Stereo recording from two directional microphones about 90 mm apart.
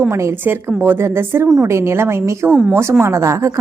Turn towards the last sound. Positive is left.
turn(degrees=-35)  # may be behind; listen again after turning